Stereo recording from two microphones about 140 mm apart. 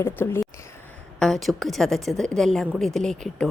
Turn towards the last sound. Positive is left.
turn(degrees=5)  # may be behind; listen again after turning